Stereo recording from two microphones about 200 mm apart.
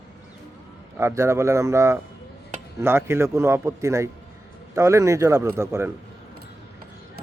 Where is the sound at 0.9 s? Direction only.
15° right (ahead or behind).